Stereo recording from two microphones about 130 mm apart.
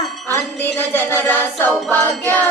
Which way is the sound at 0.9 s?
15° left (ahead or behind).